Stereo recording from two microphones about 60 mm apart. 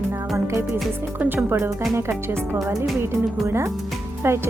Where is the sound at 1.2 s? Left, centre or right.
Right.